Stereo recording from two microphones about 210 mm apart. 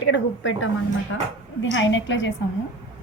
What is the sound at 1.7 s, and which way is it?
Speech, 60° left (ahead or behind).